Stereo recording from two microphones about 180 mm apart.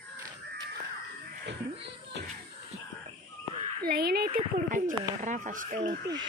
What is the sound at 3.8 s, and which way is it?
Speech, 60° right (ahead or behind).